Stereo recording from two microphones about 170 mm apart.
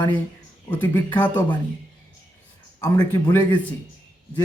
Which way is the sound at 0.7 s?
10° left (ahead or behind).